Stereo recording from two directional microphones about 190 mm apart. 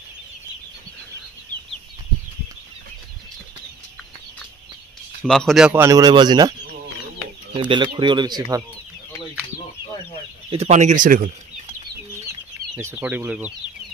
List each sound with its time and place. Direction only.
5.2 s speech: 5° left (ahead or behind); by 6.5 s 20° right (ahead or behind)
7.5 s speech: 25° right (ahead or behind)
10.5 s speech: 35° right (ahead or behind)
12.7 s speech: 5° right (ahead or behind)